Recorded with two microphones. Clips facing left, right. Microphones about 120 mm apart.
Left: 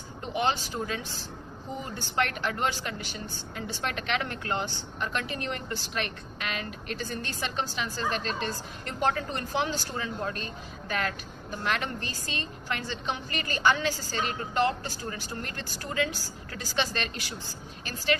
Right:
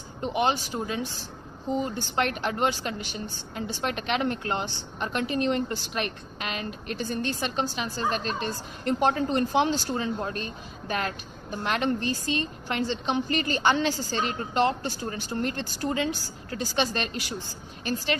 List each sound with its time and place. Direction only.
0.2 s a woman's voice: 20° right (ahead or behind)